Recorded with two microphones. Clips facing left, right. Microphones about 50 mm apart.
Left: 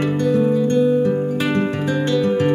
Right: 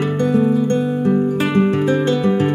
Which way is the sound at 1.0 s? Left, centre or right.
Right.